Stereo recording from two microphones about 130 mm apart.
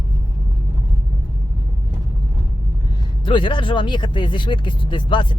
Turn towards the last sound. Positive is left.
turn(degrees=40)  # may be behind; listen again after turning